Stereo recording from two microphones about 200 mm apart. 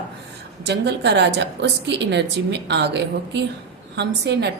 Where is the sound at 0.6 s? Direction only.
60° right (ahead or behind).